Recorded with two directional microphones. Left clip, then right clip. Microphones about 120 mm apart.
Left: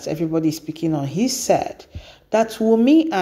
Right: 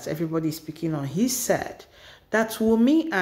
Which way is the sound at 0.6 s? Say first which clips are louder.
Left 6 dB; 30° left (ahead or behind).